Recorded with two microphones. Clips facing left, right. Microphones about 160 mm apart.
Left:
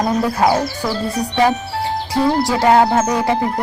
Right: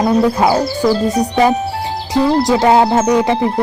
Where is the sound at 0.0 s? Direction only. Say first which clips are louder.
Right 4 dB; 30° right (ahead or behind).